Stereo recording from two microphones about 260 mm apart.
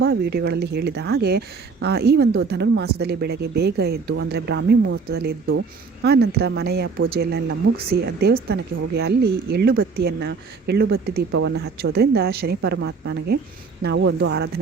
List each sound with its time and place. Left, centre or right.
0.0 s a woman's voice: right